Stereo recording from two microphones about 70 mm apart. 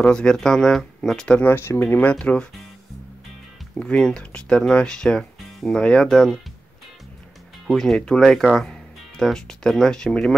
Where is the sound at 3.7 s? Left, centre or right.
Centre.